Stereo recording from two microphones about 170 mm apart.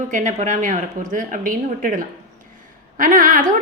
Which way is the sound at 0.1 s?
50° right (ahead or behind).